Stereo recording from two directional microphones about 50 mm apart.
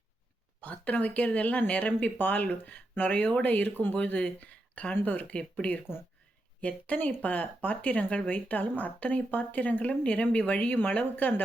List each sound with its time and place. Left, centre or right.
0.6 s speech: left
3.9 s speech: left